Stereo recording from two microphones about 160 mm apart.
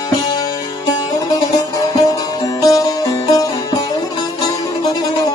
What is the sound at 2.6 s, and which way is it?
Music, 20° left (ahead or behind).